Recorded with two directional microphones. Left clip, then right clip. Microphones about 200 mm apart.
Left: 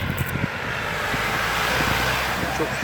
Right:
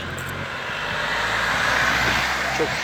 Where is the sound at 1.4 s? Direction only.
45° left (ahead or behind).